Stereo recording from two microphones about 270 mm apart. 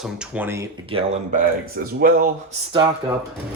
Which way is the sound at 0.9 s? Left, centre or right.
Right.